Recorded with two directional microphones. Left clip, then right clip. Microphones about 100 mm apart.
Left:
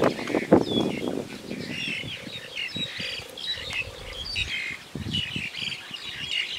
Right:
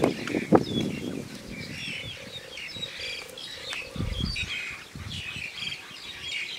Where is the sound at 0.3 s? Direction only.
45° left (ahead or behind).